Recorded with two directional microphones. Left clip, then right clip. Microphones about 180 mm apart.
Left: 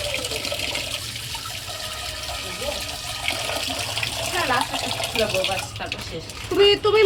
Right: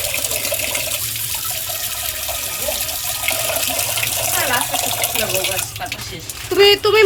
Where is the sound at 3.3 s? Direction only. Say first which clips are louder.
Right 4 dB; 45° right (ahead or behind).